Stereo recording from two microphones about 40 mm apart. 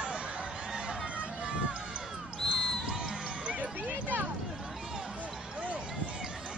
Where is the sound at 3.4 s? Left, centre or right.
Right.